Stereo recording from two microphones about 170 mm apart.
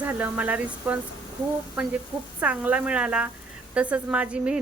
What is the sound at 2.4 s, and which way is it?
A woman's voice, 10° right (ahead or behind).